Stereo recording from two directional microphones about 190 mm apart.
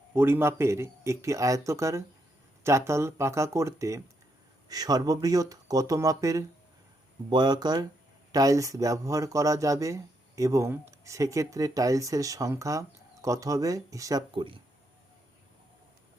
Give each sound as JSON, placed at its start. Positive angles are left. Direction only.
{"t": 0.1, "sound": "speech", "side_deg": -10}